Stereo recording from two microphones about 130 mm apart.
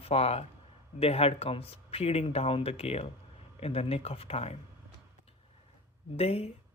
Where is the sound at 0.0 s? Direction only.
50° left (ahead or behind).